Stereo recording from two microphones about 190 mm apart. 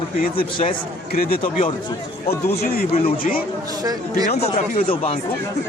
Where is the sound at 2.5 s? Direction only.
55° left (ahead or behind).